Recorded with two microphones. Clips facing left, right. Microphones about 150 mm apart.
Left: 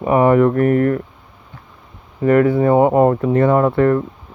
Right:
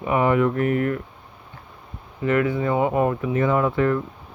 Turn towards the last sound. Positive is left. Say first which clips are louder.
# left 6 dB
turn(degrees=50)  # may be behind; listen again after turning